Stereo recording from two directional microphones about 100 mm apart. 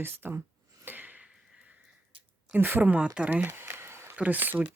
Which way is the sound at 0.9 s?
20° right (ahead or behind).